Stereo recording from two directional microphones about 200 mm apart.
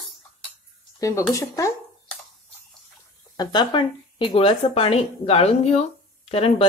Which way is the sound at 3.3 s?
20° left (ahead or behind).